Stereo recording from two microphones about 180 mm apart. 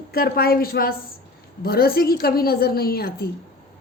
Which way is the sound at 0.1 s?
60° left (ahead or behind).